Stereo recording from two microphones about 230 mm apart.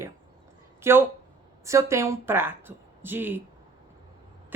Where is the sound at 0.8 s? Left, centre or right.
Centre.